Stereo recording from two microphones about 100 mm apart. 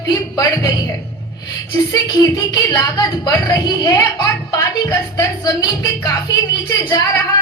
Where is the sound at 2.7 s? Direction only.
40° left (ahead or behind).